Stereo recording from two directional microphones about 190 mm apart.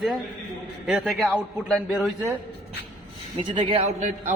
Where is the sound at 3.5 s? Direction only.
25° right (ahead or behind).